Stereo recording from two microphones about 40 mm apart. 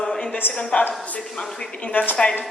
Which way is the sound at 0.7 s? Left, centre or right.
Left.